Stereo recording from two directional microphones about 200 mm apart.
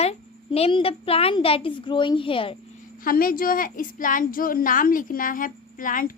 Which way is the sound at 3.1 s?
45° left (ahead or behind).